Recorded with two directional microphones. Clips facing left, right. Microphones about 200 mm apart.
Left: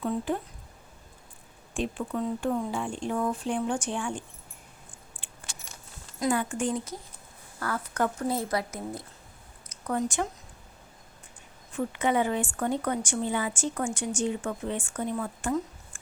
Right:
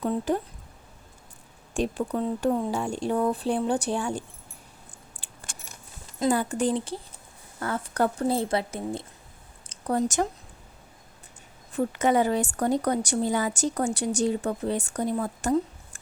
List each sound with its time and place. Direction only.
1.7 s a woman's voice: 40° right (ahead or behind)
5.2 s keys jangling: 40° right (ahead or behind)
6.3 s a woman's voice: 35° right (ahead or behind)
9.6 s a sound: 35° right (ahead or behind)
11.7 s a woman's voice: 40° right (ahead or behind)